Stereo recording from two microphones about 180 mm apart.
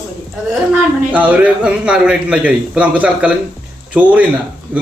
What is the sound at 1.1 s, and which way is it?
A man's voice, 10° right (ahead or behind).